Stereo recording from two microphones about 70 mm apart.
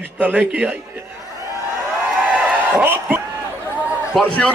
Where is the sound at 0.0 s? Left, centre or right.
Right.